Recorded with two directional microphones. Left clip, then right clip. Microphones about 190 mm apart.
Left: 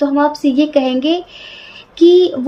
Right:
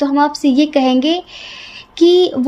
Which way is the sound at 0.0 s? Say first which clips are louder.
Even; 40° right (ahead or behind).